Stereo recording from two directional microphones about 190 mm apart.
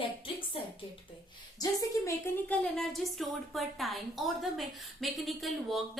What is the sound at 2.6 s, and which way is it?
A woman's voice, centre (ahead or behind).